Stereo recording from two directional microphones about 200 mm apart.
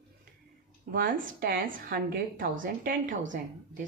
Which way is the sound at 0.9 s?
45° right (ahead or behind).